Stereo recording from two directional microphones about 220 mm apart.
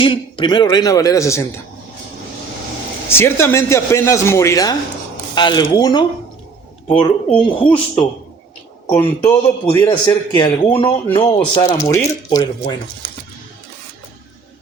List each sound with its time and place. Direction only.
0.0 s a man's voice: 20° left (ahead or behind)
3.1 s a man's voice: 10° left (ahead or behind)
8.9 s a man's voice: 10° left (ahead or behind)